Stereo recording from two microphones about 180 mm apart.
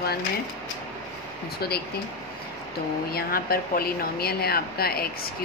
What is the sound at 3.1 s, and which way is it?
Speech, 55° left (ahead or behind).